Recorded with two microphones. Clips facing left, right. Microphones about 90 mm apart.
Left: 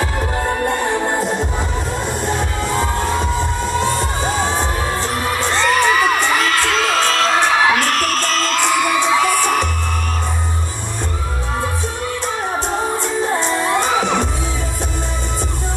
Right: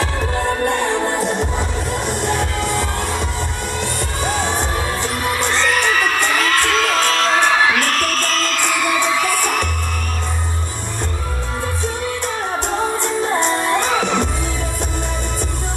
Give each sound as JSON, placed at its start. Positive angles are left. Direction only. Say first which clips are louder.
{"t": 1.2, "sound": "music", "louder": "even", "side_deg": -20}
{"t": 2.8, "sound": "music", "louder": "left 3 dB", "side_deg": 20}
{"t": 5.5, "sound": "crowd", "louder": "left 4 dB", "side_deg": 15}
{"t": 8.5, "sound": "music", "louder": "left 3 dB", "side_deg": 20}
{"t": 13.5, "sound": "music", "louder": "even", "side_deg": 15}